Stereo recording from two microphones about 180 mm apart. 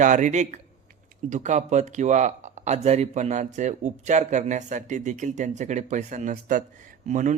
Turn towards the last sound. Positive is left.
turn(degrees=-45)  # may be behind; listen again after turning